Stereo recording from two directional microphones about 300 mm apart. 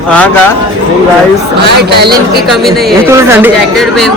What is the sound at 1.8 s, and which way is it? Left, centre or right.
Speech, right.